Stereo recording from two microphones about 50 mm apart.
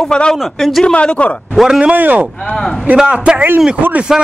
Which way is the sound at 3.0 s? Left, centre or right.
Right.